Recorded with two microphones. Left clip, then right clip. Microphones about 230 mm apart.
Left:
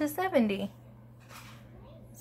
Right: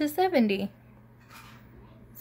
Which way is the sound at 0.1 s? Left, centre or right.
Right.